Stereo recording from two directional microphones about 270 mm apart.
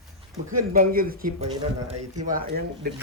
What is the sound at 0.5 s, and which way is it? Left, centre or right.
Speech, right.